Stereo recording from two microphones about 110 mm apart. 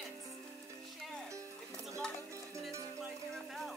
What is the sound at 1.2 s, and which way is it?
Music, 30° right (ahead or behind).